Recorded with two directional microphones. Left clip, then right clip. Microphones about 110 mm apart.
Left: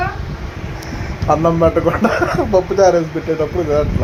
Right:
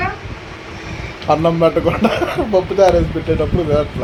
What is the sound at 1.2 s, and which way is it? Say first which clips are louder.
Speech: even; centre (ahead or behind).